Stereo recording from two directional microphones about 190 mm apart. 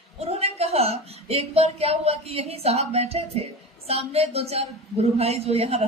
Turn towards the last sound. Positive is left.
turn(degrees=-30)  # may be behind; listen again after turning